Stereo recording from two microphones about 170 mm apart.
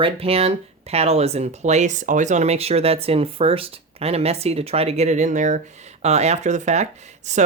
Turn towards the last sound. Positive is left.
turn(degrees=-45)  # may be behind; listen again after turning